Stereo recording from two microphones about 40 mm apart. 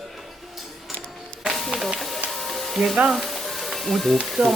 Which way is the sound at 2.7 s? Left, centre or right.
Centre.